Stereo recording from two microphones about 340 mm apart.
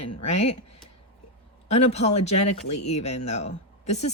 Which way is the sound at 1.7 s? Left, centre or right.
Centre.